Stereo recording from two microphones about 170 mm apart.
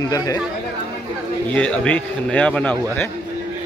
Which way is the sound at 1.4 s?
5° left (ahead or behind).